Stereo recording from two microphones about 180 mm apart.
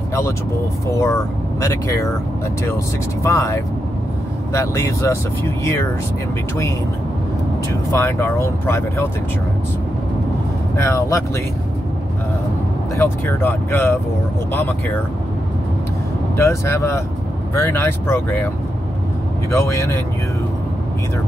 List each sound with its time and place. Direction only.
0.9 s speech: 15° left (ahead or behind)
3.3 s speech: 15° left (ahead or behind)
7.9 s speech: 15° left (ahead or behind)
10.8 s speech: 15° left (ahead or behind)
12.9 s speech: 10° left (ahead or behind)
16.3 s speech: 15° left (ahead or behind)
19.5 s speech: 15° left (ahead or behind)